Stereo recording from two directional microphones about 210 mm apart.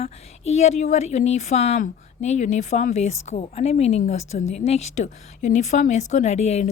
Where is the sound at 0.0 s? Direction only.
30° left (ahead or behind).